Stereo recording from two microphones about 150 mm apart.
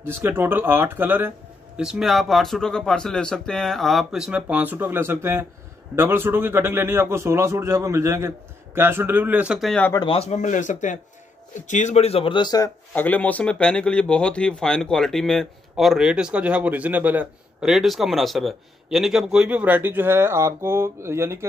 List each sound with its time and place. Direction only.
0.0 s a man's voice: 15° right (ahead or behind)
1.8 s a man's voice: 5° right (ahead or behind)
9.9 s a man's voice: 40° left (ahead or behind)
12.9 s speech: 10° left (ahead or behind); by 21.5 s 15° right (ahead or behind)